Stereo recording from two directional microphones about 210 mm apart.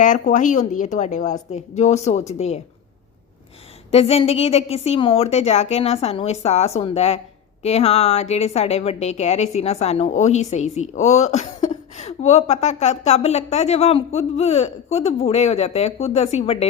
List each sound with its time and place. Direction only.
0.0 s a woman's voice: 35° left (ahead or behind)
3.9 s a woman's voice: 30° left (ahead or behind)